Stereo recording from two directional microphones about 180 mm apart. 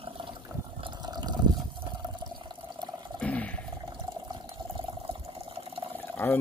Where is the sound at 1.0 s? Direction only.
20° right (ahead or behind).